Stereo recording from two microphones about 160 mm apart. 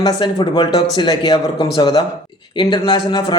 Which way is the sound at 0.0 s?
25° left (ahead or behind).